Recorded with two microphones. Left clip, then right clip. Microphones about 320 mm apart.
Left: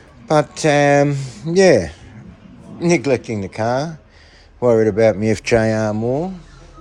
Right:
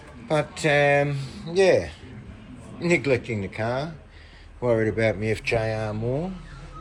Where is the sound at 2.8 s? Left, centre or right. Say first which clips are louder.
Left 6 dB; centre.